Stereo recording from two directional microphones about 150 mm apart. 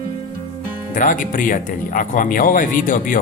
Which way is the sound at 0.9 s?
60° left (ahead or behind).